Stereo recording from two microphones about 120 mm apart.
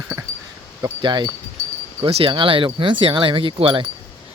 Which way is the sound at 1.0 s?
40° right (ahead or behind).